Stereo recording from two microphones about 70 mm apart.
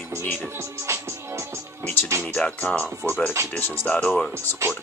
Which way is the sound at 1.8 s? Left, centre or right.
Left.